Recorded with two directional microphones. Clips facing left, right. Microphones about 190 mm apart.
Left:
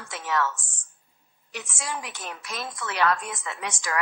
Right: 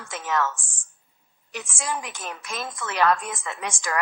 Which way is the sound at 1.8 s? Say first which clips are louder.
Right 4 dB; 50° right (ahead or behind).